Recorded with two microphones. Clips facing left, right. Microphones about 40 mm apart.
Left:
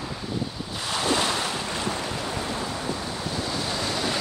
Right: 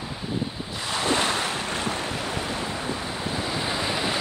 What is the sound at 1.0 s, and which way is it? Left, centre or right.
Waves, right.